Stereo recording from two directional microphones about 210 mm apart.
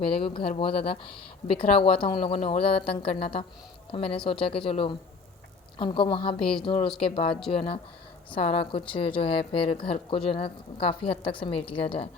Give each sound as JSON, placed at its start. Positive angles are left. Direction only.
{"t": 0.1, "sound": "speech", "side_deg": 25}